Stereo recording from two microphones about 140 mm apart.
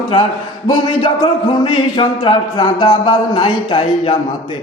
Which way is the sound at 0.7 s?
30° left (ahead or behind).